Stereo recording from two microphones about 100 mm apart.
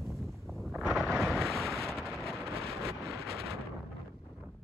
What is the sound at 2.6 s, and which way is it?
Vehicle, 80° right.